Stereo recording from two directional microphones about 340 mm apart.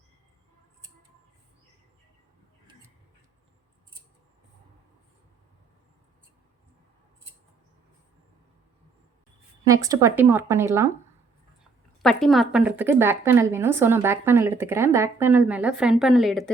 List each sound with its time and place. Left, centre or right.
9.6 s speech: centre
12.0 s speech: centre